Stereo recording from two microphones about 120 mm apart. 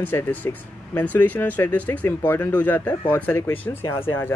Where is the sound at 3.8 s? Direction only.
50° left (ahead or behind).